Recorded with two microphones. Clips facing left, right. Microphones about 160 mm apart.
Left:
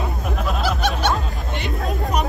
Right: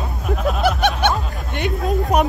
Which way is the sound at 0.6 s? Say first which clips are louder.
Right 4 dB; 55° right (ahead or behind).